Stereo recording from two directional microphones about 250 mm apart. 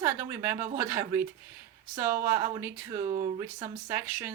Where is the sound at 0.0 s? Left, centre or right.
Centre.